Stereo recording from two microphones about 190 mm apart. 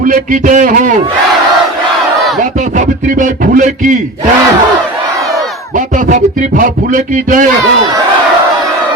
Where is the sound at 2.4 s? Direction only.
40° right (ahead or behind).